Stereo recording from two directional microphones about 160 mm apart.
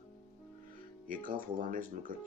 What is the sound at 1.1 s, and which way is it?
Speech, 60° right (ahead or behind).